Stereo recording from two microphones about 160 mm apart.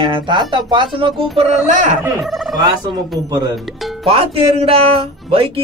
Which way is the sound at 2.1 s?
Centre (ahead or behind).